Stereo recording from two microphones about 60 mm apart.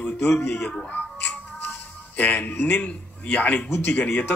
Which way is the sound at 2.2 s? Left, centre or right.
Left.